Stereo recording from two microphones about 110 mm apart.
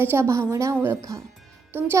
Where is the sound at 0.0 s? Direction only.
20° right (ahead or behind).